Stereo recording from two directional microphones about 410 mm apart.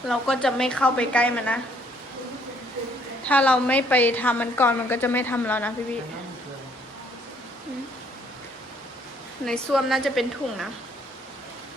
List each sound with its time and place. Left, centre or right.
0.1 s a woman's voice: centre
3.2 s a woman's voice: centre
9.5 s a woman's voice: centre